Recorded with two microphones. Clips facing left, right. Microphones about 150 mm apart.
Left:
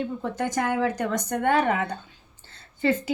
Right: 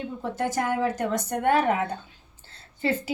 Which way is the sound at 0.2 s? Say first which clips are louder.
Right 4 dB; 5° right (ahead or behind).